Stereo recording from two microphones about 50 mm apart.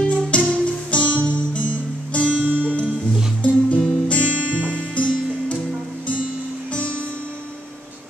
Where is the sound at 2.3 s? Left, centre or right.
Right.